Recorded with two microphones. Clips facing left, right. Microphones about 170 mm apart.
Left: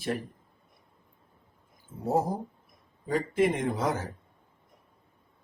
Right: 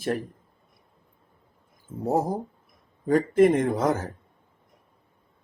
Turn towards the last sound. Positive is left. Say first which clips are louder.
# right 5 dB
turn(degrees=-45)  # may be behind; listen again after turning